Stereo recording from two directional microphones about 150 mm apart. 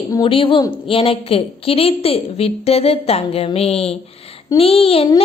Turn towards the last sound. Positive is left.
turn(degrees=40)  # may be behind; listen again after turning